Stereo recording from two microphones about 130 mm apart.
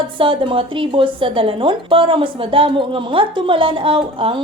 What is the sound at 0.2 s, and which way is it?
A woman's voice, 40° right (ahead or behind).